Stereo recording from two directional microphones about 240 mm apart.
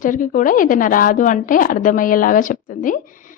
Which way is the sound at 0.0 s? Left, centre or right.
Left.